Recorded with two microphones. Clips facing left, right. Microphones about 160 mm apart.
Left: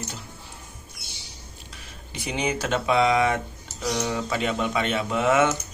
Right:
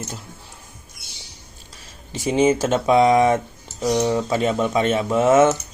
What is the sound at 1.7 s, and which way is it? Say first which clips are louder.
Speech: right 6 dB; 40° right (ahead or behind).